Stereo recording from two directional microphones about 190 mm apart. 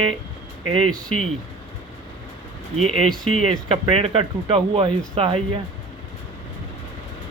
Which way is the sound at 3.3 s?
30° right (ahead or behind).